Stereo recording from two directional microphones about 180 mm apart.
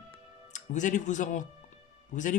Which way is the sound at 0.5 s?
45° left (ahead or behind).